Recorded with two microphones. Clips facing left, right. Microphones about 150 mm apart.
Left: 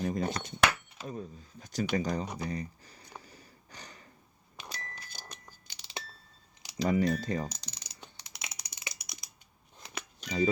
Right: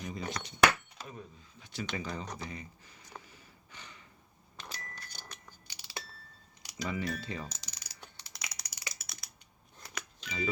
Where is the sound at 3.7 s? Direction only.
40° left (ahead or behind).